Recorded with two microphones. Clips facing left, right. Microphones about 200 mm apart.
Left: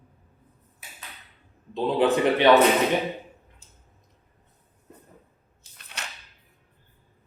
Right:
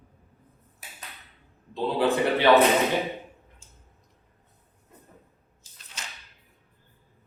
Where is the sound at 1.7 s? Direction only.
20° left (ahead or behind).